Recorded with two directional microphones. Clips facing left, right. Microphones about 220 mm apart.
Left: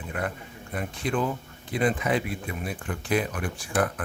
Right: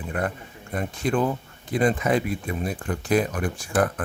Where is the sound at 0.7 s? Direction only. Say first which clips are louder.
Right 4 dB; 45° right (ahead or behind).